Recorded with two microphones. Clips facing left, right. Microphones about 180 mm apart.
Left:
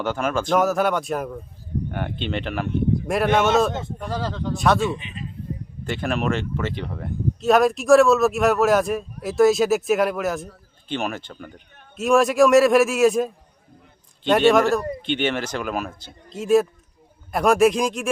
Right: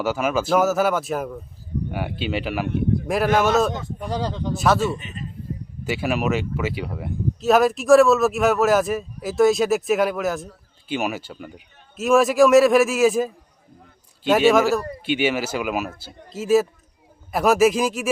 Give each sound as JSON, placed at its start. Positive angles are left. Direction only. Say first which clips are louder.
{"t": 0.0, "sound": "speech", "louder": "right 2 dB", "side_deg": -5}
{"t": 4.1, "sound": "speech", "louder": "right 1 dB", "side_deg": -15}
{"t": 4.5, "sound": "speech", "louder": "even", "side_deg": 0}
{"t": 4.9, "sound": "a man's voice", "louder": "right 1 dB", "side_deg": -45}
{"t": 5.8, "sound": "speech", "louder": "right 1 dB", "side_deg": -5}